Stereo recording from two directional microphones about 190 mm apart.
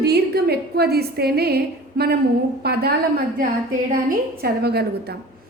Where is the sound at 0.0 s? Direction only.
60° right (ahead or behind).